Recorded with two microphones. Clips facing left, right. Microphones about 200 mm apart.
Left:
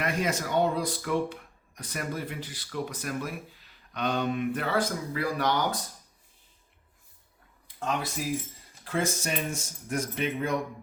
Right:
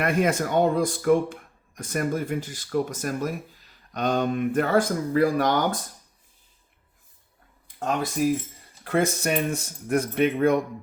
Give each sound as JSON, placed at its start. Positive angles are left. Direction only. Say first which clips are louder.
{"t": 0.0, "sound": "speech", "louder": "right 6 dB", "side_deg": -55}
{"t": 8.8, "sound": "speech", "louder": "right 6 dB", "side_deg": -60}